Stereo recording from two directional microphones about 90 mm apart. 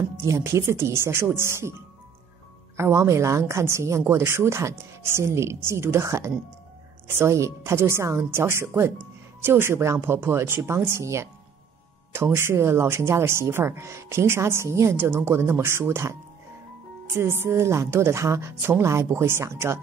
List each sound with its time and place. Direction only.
0.2 s speech: 35° right (ahead or behind)
2.8 s a woman's voice: 30° right (ahead or behind)